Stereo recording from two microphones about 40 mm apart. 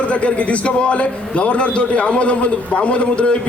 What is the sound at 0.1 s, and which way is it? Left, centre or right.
A man's voice, left.